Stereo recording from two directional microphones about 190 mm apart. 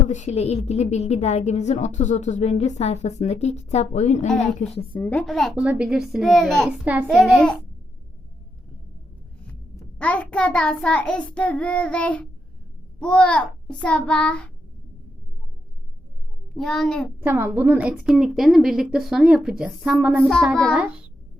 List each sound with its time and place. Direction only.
0.0 s a woman's voice: 40° left (ahead or behind)
4.9 s a woman's voice: 10° left (ahead or behind)
9.5 s a child's voice: 5° left (ahead or behind)
16.6 s a woman's voice: centre (ahead or behind)
17.2 s a woman's voice: 10° right (ahead or behind)